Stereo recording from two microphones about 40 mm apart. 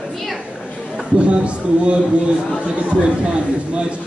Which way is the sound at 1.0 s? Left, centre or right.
Right.